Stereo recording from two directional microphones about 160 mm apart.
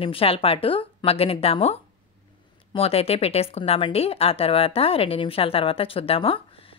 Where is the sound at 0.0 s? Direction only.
35° left (ahead or behind).